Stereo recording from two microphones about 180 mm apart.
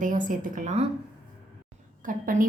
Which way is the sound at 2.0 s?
50° right (ahead or behind).